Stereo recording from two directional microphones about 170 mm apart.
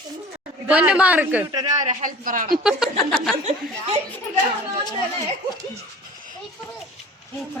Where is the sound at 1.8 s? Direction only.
45° right (ahead or behind).